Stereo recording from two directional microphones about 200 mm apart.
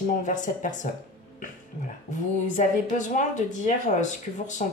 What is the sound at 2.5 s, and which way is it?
Speech, 40° left (ahead or behind).